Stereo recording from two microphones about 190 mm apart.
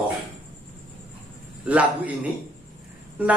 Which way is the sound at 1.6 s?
5° right (ahead or behind).